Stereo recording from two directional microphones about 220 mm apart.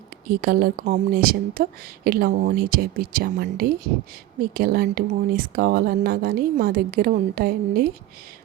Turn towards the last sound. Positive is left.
turn(degrees=-40)  # may be behind; listen again after turning